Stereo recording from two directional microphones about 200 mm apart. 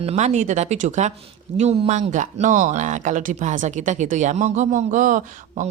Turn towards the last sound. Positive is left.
turn(degrees=-40)  # may be behind; listen again after turning